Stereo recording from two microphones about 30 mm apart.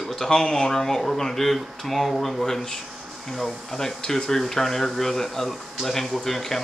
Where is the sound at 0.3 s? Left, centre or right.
Left.